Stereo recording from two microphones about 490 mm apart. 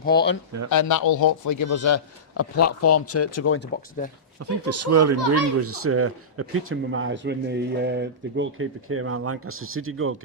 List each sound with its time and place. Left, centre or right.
0.0 s speech: centre
0.7 s a man's voice: left; by 4.1 s centre
4.4 s speech: right